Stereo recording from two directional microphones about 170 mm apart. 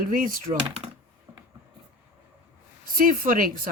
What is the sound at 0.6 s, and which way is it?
Computer keyboard, 35° right (ahead or behind).